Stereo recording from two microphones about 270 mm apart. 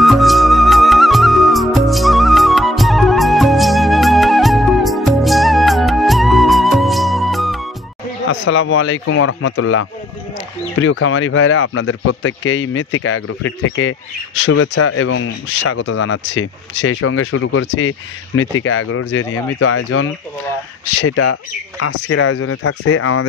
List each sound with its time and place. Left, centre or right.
0.0 s music: centre
8.3 s speech: left